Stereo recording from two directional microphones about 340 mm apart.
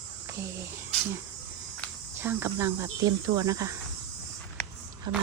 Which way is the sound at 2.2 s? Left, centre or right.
Centre.